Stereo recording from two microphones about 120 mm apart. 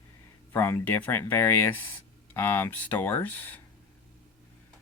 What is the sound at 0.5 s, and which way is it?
Speech, 20° left (ahead or behind).